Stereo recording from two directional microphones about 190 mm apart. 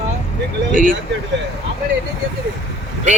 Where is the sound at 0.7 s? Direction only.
45° right (ahead or behind).